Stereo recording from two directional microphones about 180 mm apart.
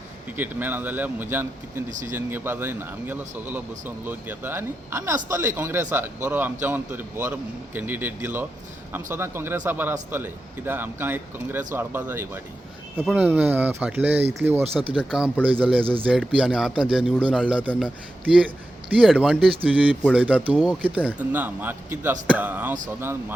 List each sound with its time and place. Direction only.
0.3 s speech: 10° right (ahead or behind)
1.9 s speech: 45° right (ahead or behind)
2.1 s speech: 10° right (ahead or behind)
14.6 s speech: 30° right (ahead or behind)
14.9 s speech: 5° right (ahead or behind)
15.8 s speech: 30° right (ahead or behind)
16.3 s speech: 5° right (ahead or behind)